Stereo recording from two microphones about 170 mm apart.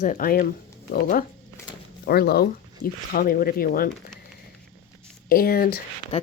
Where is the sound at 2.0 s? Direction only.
65° left (ahead or behind).